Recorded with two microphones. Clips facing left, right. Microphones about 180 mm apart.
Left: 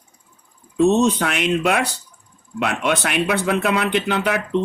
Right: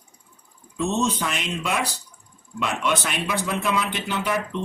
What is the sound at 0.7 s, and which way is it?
A man's voice, 60° left (ahead or behind).